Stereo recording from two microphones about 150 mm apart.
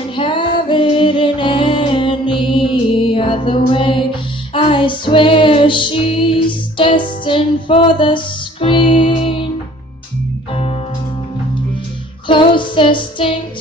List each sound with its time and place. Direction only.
0.1 s music: 35° left (ahead or behind)
10.5 s music: 40° left (ahead or behind)
12.3 s music: 35° left (ahead or behind)